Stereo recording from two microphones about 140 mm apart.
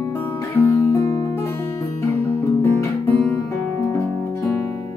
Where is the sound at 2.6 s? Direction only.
20° left (ahead or behind).